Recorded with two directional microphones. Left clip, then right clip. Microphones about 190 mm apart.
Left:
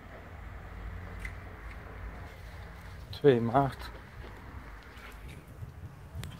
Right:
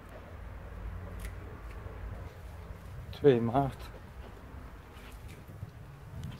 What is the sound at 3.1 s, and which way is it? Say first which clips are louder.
Speech: left 1 dB; 15° left (ahead or behind).